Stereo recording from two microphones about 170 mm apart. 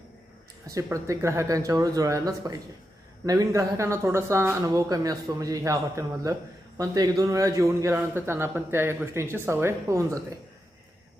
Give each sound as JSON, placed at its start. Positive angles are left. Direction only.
{"t": 0.7, "sound": "a man's voice", "side_deg": -20}